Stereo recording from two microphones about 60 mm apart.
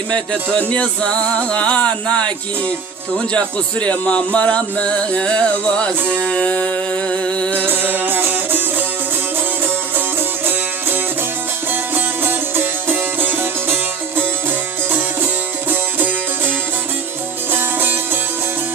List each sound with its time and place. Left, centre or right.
0.7 s music: centre
7.5 s music: right
10.4 s music: right
15.7 s music: right
17.5 s music: right